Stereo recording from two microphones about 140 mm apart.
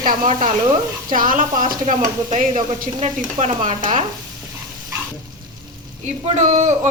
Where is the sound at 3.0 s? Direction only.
50° right (ahead or behind).